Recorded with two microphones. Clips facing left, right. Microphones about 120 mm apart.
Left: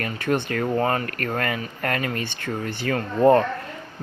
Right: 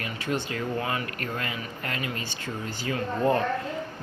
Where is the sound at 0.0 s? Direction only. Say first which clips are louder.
Left 6 dB; 55° left (ahead or behind).